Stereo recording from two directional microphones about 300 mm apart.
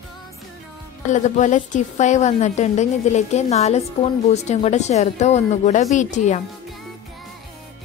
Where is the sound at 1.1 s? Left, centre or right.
Left.